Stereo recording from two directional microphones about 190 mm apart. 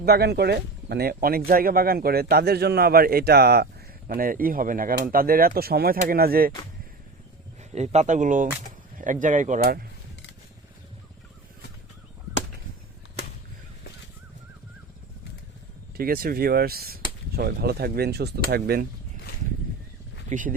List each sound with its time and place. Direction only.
0.0 s speech: 55° right (ahead or behind)
7.7 s speech: 35° right (ahead or behind)
16.0 s speech: 50° right (ahead or behind)
20.3 s speech: 40° right (ahead or behind)